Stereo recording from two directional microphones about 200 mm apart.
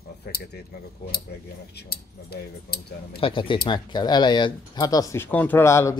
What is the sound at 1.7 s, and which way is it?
Speech, 50° left (ahead or behind).